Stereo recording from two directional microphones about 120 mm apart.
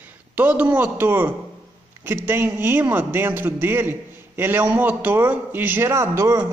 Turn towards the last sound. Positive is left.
turn(degrees=-20)  # may be behind; listen again after turning